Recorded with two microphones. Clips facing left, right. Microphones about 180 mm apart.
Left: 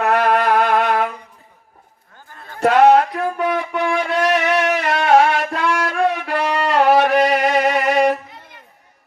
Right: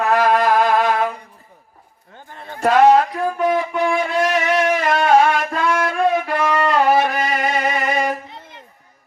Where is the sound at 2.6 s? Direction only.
65° left (ahead or behind).